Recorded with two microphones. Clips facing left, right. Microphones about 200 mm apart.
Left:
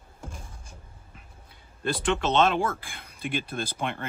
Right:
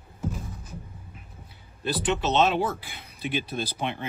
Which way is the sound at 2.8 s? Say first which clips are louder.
Right 1 dB; 50° left (ahead or behind).